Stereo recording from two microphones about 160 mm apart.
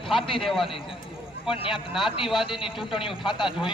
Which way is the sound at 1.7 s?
Centre (ahead or behind).